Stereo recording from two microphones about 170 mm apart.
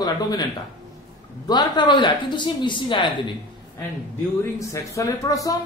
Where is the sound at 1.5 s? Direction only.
25° left (ahead or behind).